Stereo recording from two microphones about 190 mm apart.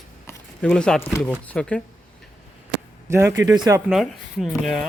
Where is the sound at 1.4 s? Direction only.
5° left (ahead or behind).